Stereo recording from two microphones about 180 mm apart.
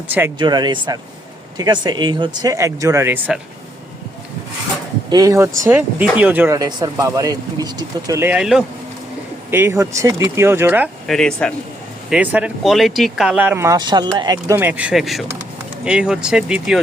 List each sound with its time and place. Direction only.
0.3 s speech: 25° right (ahead or behind); by 3.4 s 10° right (ahead or behind)
5.0 s speech: 20° right (ahead or behind)
6.6 s speech: 25° right (ahead or behind); by 8.6 s 5° right (ahead or behind)
9.5 s speech: 15° right (ahead or behind)
11.0 s speech: centre (ahead or behind)
12.1 s speech: 10° right (ahead or behind)